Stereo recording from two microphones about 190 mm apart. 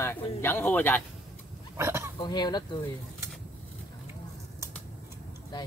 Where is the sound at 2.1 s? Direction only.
20° left (ahead or behind).